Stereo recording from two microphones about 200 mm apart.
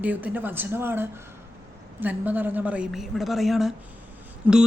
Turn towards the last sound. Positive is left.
turn(degrees=-10)  # may be behind; listen again after turning